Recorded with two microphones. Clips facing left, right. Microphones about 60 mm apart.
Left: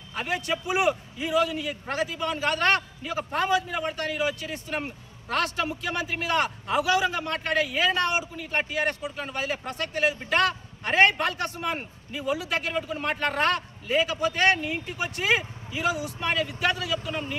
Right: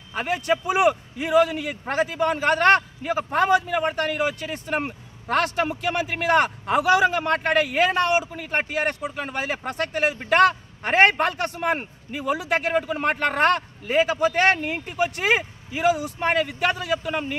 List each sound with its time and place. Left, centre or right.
0.1 s a man's voice: right
0.8 s speech: right